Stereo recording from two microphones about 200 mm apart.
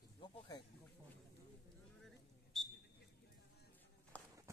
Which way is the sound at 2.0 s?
Centre (ahead or behind).